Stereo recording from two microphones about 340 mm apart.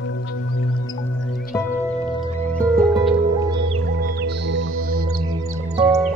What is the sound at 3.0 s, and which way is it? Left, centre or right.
Music, centre.